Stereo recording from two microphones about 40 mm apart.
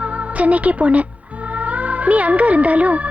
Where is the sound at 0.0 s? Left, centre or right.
Right.